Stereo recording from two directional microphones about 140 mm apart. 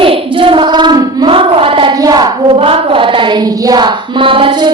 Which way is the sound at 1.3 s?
40° right (ahead or behind).